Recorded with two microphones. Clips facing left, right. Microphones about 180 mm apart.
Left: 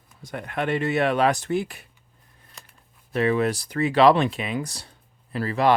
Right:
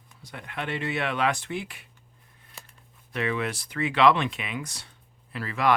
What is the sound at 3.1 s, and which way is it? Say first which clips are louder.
Speech: left 7 dB; 40° left (ahead or behind).